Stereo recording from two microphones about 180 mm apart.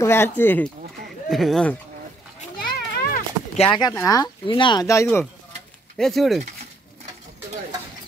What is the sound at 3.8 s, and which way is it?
Speech, 20° left (ahead or behind).